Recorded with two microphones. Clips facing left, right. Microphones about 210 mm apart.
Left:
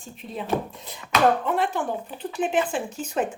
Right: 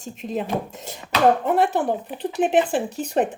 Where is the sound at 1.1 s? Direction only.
40° right (ahead or behind).